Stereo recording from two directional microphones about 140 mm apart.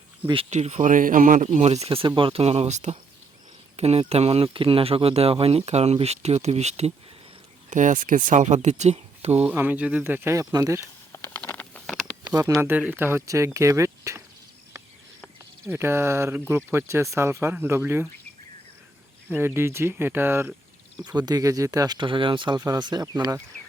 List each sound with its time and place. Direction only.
0.5 s speech: 55° right (ahead or behind)
1.5 s speech: 50° right (ahead or behind)
7.7 s speech: 65° right (ahead or behind)
9.4 s speech: 10° right (ahead or behind)
11.3 s a sound: 10° left (ahead or behind)
12.2 s speech: 25° right (ahead or behind)
15.6 s speech: 15° right (ahead or behind)
19.3 s speech: 15° right (ahead or behind)
21.0 s speech: 30° right (ahead or behind)